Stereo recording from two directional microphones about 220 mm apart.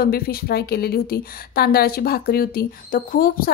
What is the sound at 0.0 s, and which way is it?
Speech, 45° left (ahead or behind).